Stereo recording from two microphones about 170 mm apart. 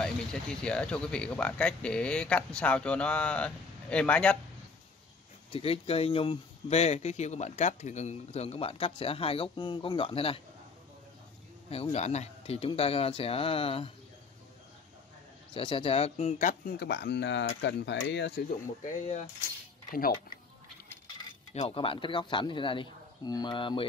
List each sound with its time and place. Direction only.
0.0 s speech: 5° left (ahead or behind)
5.5 s speech: 35° left (ahead or behind)
11.7 s speech: 35° left (ahead or behind)
15.5 s speech: 30° left (ahead or behind); by 16.7 s 50° left (ahead or behind)
16.8 s speech: 80° left
18.9 s speech: 45° left (ahead or behind)
21.5 s speech: 35° left (ahead or behind)